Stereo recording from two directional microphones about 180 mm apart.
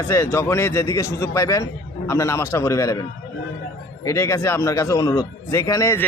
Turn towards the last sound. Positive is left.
turn(degrees=15)  # may be behind; listen again after turning